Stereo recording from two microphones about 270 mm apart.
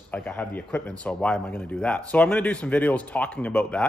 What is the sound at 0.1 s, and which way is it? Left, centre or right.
Speech, centre.